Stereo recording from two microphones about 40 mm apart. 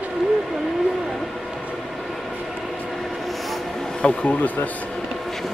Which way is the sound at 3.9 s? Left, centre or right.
Left.